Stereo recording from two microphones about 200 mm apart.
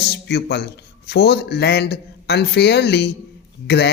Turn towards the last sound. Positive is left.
turn(degrees=55)  # may be behind; listen again after turning